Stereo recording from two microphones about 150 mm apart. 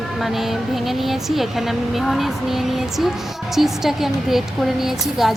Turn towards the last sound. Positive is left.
turn(degrees=0)  # may be behind; listen again after turning